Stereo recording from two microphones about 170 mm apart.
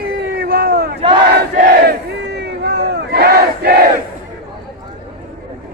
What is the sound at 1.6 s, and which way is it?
Battle cry, 55° right (ahead or behind).